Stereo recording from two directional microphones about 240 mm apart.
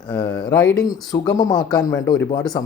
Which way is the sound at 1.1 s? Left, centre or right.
Centre.